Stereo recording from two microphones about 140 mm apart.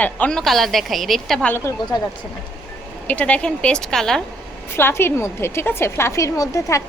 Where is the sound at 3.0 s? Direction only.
10° left (ahead or behind).